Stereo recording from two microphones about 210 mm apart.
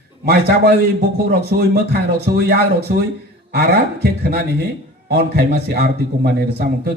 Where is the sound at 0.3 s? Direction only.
50° right (ahead or behind).